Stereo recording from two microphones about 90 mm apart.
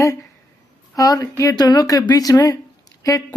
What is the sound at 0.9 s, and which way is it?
Speech, 40° left (ahead or behind).